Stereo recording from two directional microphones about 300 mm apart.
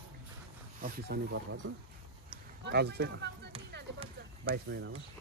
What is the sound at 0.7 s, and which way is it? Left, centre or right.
Speech, right.